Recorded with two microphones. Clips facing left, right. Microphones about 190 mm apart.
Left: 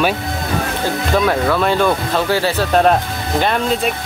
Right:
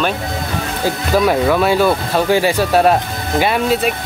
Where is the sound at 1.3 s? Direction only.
10° right (ahead or behind).